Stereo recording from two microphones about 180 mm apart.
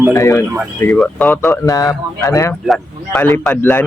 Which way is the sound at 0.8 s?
5° left (ahead or behind).